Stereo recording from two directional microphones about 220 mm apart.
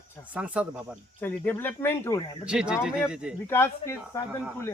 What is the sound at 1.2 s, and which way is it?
Speech, 10° left (ahead or behind).